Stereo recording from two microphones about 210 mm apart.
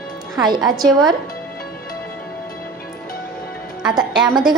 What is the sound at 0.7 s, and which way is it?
Speech, 20° right (ahead or behind).